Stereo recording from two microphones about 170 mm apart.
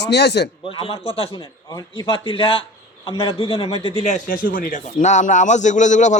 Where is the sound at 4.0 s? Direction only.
50° left (ahead or behind).